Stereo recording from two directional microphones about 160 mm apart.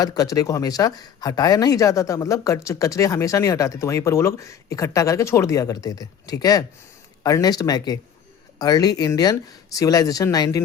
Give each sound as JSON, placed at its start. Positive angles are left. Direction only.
{"t": 0.0, "sound": "speech", "side_deg": 25}